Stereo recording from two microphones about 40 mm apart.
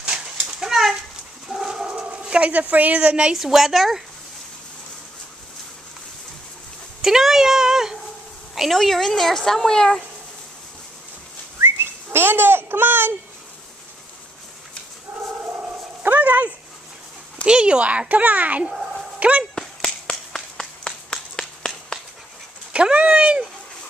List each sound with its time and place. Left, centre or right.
0.5 s a sound: centre
1.7 s dog: right
2.0 s dog: right
2.5 s a child's voice: right
3.3 s a woman's voice: centre
7.0 s speech: centre
8.5 s speech: centre
11.6 s whistling: right
16.0 s dog: right
17.5 s a child's voice: right
19.1 s dog: right
19.5 s a sound: centre
22.7 s cat: right